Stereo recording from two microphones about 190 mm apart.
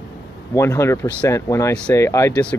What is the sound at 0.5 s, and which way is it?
Speech, 15° left (ahead or behind).